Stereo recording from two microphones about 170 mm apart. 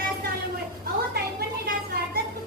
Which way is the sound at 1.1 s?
65° right (ahead or behind).